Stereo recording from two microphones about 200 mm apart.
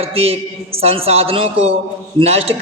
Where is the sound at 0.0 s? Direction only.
30° right (ahead or behind).